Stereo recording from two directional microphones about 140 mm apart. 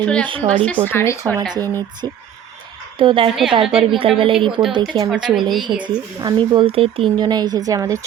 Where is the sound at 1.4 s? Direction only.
25° right (ahead or behind).